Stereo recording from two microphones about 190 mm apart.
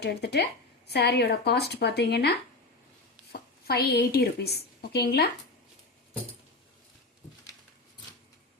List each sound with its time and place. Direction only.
0.0 s speech: 60° left (ahead or behind)
3.3 s a woman's voice: 55° left (ahead or behind)